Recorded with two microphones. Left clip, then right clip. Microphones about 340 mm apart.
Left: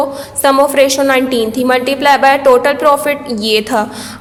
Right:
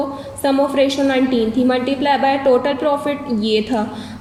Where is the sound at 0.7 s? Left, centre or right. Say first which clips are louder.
Left 6 dB; centre.